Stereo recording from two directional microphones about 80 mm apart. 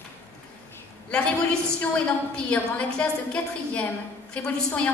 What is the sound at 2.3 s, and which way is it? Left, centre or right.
A woman's voice, centre.